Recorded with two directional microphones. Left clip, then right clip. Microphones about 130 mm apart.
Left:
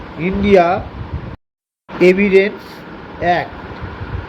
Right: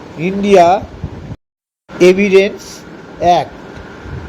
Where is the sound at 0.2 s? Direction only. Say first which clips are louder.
Right 3 dB; 35° right (ahead or behind).